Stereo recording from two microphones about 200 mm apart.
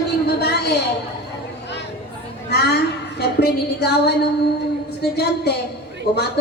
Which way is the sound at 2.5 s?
55° left (ahead or behind).